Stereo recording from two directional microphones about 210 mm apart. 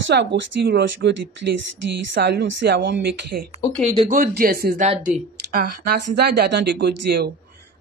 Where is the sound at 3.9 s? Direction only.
35° right (ahead or behind).